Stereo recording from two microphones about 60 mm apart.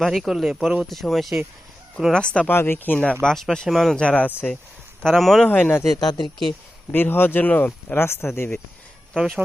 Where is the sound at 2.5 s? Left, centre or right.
Left.